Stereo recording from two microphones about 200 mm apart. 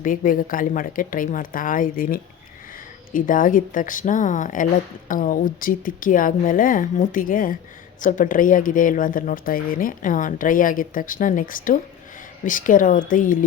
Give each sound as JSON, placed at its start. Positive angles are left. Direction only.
{"t": 0.0, "sound": "a woman's voice", "side_deg": 40}